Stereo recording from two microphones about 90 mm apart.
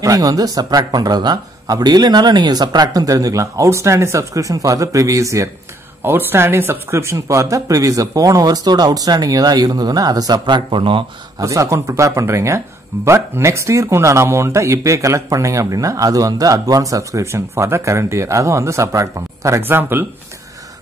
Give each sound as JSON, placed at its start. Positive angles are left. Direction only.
{"t": 0.0, "sound": "speech", "side_deg": -40}
{"t": 6.0, "sound": "speech", "side_deg": -25}
{"t": 10.4, "sound": "a man's voice", "side_deg": -70}
{"t": 11.3, "sound": "speech", "side_deg": -35}
{"t": 19.6, "sound": "speech", "side_deg": -25}